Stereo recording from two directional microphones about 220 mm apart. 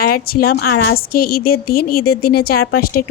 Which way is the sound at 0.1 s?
45° left (ahead or behind).